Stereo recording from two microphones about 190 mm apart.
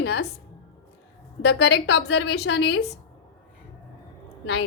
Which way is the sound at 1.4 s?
60° left (ahead or behind).